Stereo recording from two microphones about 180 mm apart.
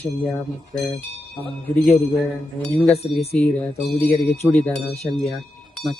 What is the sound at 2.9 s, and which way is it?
Wind chime, 35° left (ahead or behind).